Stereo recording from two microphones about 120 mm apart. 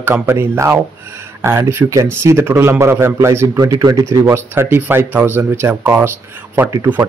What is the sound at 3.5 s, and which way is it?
A man's voice, 35° right (ahead or behind).